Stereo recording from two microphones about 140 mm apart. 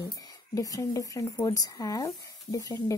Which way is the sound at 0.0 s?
25° left (ahead or behind).